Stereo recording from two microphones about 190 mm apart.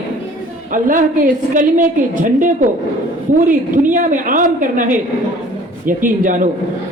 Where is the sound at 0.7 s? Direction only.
45° right (ahead or behind).